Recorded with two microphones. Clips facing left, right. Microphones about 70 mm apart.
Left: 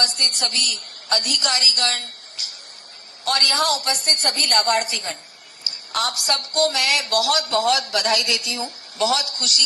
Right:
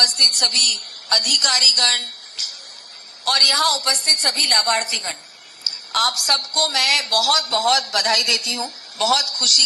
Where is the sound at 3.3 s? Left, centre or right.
Right.